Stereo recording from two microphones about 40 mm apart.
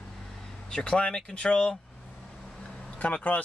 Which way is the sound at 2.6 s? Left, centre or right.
Left.